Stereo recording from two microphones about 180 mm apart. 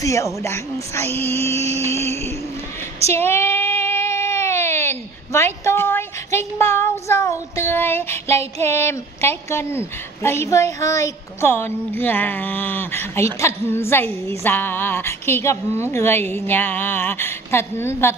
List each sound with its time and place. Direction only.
0.0 s a woman's voice: 15° left (ahead or behind)
3.1 s baby cry: 10° left (ahead or behind)
8.6 s a woman's voice: 15° left (ahead or behind)